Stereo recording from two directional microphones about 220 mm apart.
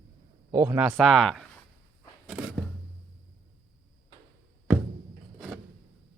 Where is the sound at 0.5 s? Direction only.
10° right (ahead or behind).